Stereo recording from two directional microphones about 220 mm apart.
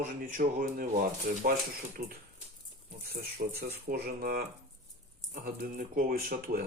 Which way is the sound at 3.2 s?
40° right (ahead or behind).